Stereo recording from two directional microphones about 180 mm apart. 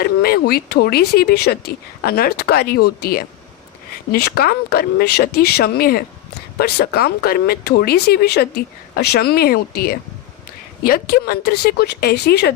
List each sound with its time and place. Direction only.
0.0 s speech: 60° left (ahead or behind)